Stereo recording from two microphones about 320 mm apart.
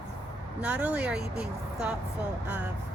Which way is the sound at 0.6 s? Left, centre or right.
Centre.